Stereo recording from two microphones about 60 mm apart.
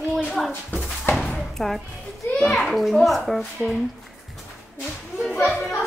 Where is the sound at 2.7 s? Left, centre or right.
Centre.